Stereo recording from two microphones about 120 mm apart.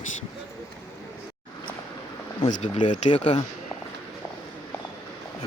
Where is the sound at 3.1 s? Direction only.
45° left (ahead or behind).